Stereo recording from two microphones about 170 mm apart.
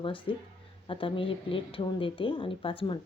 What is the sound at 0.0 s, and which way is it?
Speech, 30° left (ahead or behind).